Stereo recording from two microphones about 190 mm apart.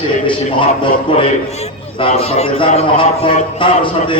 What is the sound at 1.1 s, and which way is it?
A man's voice, 25° left (ahead or behind).